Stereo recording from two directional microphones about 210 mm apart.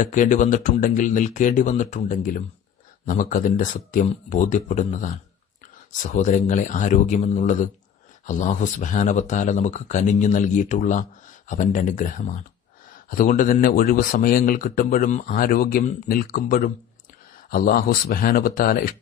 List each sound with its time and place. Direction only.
0.0 s a man's voice: 40° left (ahead or behind)